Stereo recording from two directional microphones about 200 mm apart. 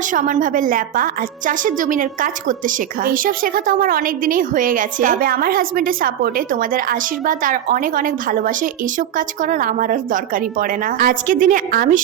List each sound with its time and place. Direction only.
0.1 s a woman's voice: 40° right (ahead or behind)